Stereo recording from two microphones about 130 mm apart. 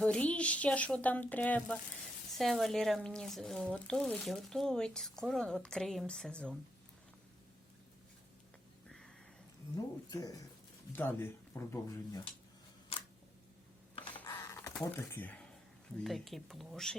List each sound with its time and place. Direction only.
0.0 s speech: 10° left (ahead or behind)
2.4 s speech: centre (ahead or behind)
8.9 s a sound: 5° left (ahead or behind)
9.7 s speech: 30° left (ahead or behind)
10.9 s speech: 15° left (ahead or behind)
12.9 s a sound: 45° left (ahead or behind)
13.9 s computer keyboard: 40° left (ahead or behind)
14.3 s a sound: 25° left (ahead or behind)
14.8 s speech: 15° left (ahead or behind)
16.0 s speech: centre (ahead or behind)